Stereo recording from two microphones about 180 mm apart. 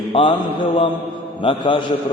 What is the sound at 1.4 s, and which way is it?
Speech, 30° left (ahead or behind).